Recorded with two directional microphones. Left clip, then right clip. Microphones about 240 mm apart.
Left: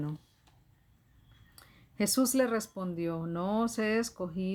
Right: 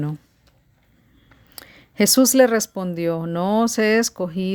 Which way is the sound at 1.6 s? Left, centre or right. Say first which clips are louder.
Right 14 dB; right.